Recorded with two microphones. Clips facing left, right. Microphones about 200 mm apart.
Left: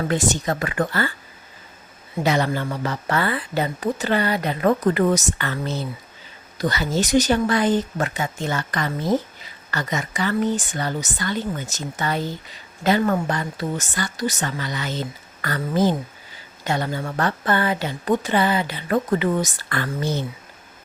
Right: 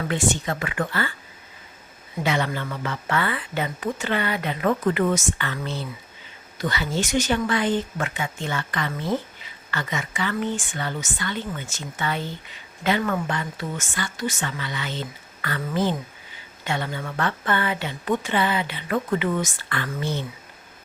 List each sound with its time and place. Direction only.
0.1 s speech: 40° left (ahead or behind)
2.2 s speech: 40° left (ahead or behind)